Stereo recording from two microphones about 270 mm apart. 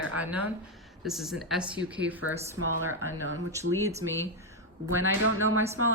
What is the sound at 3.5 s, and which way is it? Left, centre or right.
Speech, centre.